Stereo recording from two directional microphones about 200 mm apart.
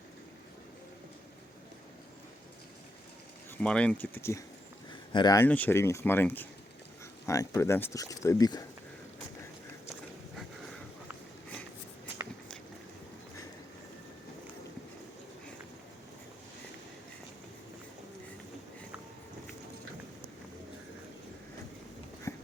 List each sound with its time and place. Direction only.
3.6 s speech: 5° left (ahead or behind)
10.3 s a sound: centre (ahead or behind)
22.3 s dog: 15° left (ahead or behind)